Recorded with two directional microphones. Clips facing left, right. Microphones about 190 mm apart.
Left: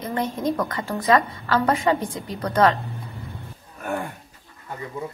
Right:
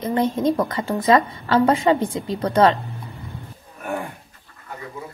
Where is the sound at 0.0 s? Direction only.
20° right (ahead or behind).